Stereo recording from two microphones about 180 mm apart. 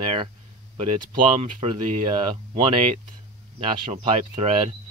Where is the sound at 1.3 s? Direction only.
30° right (ahead or behind).